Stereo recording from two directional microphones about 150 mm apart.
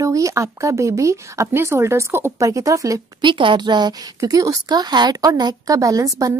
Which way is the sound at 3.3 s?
35° right (ahead or behind).